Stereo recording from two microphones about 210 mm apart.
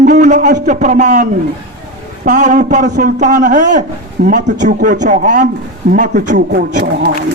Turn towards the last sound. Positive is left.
turn(degrees=-50)  # may be behind; listen again after turning